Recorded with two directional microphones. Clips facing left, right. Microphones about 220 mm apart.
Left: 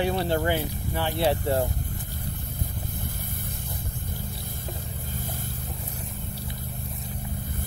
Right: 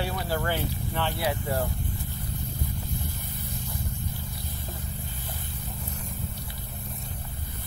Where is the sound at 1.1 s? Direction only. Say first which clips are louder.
Left 8 dB; 25° left (ahead or behind).